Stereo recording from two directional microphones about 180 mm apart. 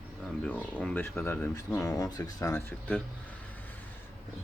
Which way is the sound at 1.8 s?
20° left (ahead or behind).